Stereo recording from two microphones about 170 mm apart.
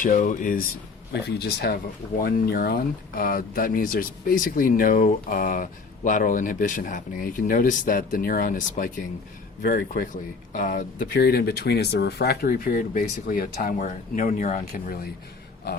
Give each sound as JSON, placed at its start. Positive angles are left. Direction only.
{"t": 0.0, "sound": "speech", "side_deg": 50}
{"t": 1.1, "sound": "speech", "side_deg": 75}
{"t": 15.7, "sound": "speech", "side_deg": 75}